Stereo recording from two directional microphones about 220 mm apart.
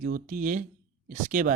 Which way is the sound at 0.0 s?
40° right (ahead or behind).